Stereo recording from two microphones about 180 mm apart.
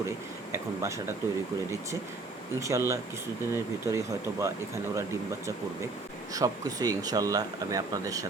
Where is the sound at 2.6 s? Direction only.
15° right (ahead or behind).